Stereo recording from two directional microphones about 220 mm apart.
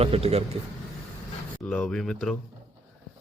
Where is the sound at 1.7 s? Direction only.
5° left (ahead or behind).